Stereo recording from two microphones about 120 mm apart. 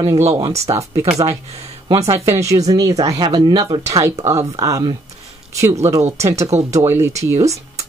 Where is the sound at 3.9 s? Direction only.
25° right (ahead or behind).